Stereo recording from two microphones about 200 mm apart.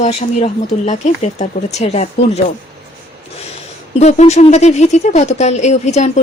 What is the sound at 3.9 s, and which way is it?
Speech, 35° left (ahead or behind).